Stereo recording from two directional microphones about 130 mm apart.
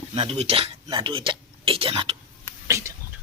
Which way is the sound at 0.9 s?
35° right (ahead or behind).